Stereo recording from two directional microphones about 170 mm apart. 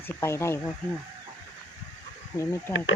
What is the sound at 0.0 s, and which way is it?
Speech, 15° left (ahead or behind).